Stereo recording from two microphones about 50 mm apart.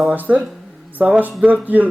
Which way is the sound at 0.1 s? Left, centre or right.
Right.